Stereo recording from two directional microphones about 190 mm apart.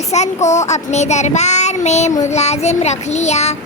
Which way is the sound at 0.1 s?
35° left (ahead or behind).